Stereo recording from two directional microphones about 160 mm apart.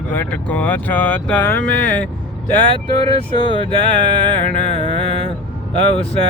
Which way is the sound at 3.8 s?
50° left (ahead or behind).